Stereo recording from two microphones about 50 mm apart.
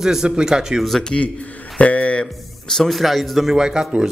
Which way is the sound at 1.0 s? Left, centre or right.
Left.